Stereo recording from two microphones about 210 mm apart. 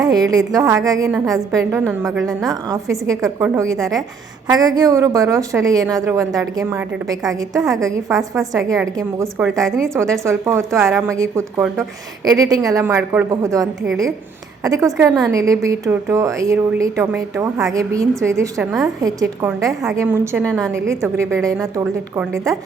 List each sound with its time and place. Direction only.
0.0 s a woman's voice: 20° right (ahead or behind)
9.6 s a woman's voice: centre (ahead or behind)
10.2 s a woman's voice: 15° right (ahead or behind)
20.4 s a woman's voice: 5° left (ahead or behind)
21.0 s a woman's voice: 10° right (ahead or behind)